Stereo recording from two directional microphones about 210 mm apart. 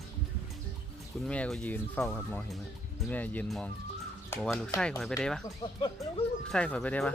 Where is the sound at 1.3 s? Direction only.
5° left (ahead or behind).